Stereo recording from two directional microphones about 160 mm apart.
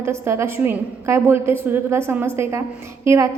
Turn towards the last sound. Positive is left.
turn(degrees=-15)  # may be behind; listen again after turning